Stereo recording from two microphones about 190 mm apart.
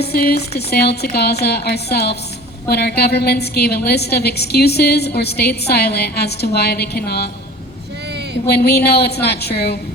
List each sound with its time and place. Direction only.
0.0 s a woman's voice: 55° left (ahead or behind)
8.4 s a woman's voice: 60° left (ahead or behind)